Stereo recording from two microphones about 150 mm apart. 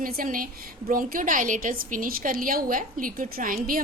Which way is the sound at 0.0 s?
70° right (ahead or behind).